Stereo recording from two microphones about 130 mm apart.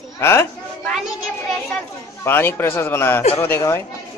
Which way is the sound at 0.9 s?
Centre (ahead or behind).